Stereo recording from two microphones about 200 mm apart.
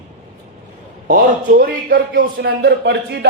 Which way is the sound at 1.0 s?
45° right (ahead or behind).